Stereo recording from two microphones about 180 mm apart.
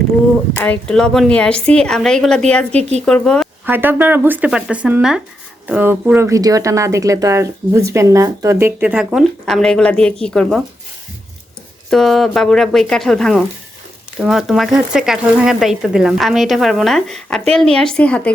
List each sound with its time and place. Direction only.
0.6 s speech: 5° left (ahead or behind)
3.7 s speech: 10° right (ahead or behind)
11.9 s speech: centre (ahead or behind)